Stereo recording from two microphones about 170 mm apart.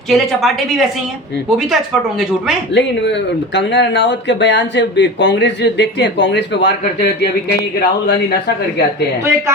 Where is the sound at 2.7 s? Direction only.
90° left; by 7.3 s 70° left (ahead or behind).